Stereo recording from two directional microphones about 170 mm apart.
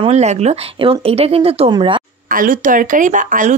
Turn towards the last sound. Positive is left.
turn(degrees=-50)  # may be behind; listen again after turning